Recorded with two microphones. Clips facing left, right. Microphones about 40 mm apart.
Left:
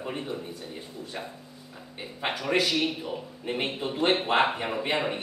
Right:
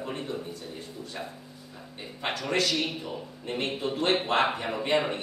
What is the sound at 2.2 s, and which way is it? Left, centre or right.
A man's voice, centre.